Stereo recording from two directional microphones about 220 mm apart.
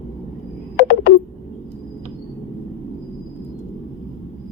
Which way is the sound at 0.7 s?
45° left (ahead or behind).